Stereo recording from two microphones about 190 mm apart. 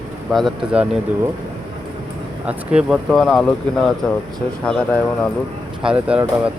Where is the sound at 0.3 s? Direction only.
5° right (ahead or behind).